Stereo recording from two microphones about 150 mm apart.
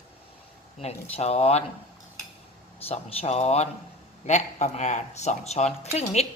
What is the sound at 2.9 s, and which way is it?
Speech, 45° left (ahead or behind).